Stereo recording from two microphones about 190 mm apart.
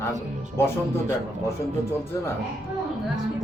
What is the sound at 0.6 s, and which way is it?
Speech, 15° left (ahead or behind).